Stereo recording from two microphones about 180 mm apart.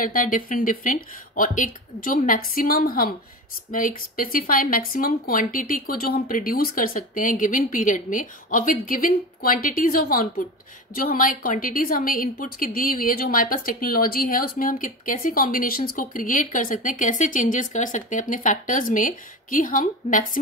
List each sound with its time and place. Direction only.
0.0 s a woman's voice: 50° left (ahead or behind)